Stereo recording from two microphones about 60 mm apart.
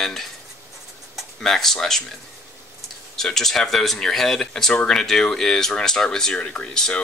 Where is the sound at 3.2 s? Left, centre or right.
Centre.